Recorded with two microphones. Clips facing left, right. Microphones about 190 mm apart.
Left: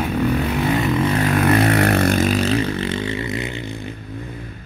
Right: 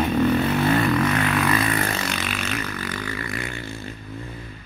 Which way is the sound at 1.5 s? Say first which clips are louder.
Left 7 dB; 70° left (ahead or behind).